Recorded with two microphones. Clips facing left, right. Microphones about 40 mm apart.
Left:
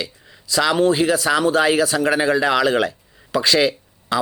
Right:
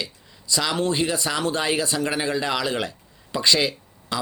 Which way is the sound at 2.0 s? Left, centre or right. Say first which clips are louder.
Left 7 dB; left.